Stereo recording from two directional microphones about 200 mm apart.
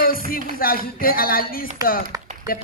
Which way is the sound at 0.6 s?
45° left (ahead or behind).